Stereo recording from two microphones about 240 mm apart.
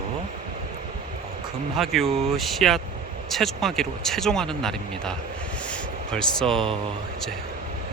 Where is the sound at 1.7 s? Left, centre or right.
Centre.